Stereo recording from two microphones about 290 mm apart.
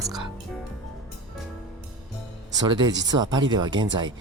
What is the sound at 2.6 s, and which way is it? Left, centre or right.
Speech, centre.